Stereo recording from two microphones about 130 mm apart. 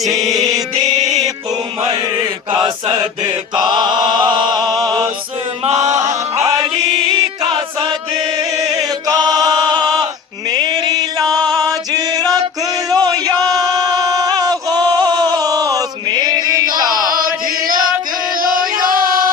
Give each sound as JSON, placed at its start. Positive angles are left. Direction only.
{"t": 0.3, "sound": "music", "side_deg": -30}
{"t": 2.5, "sound": "mantra", "side_deg": -35}
{"t": 6.0, "sound": "music", "side_deg": -60}
{"t": 6.4, "sound": "music", "side_deg": -30}
{"t": 8.4, "sound": "chant", "side_deg": -30}
{"t": 12.9, "sound": "a sound", "side_deg": -30}
{"t": 16.8, "sound": "chant", "side_deg": -30}
{"t": 18.9, "sound": "a sound", "side_deg": -90}